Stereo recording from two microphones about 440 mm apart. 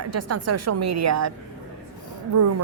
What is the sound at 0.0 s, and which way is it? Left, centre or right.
A woman's voice, right.